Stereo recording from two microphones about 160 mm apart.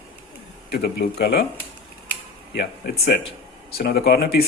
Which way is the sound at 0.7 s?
80° left.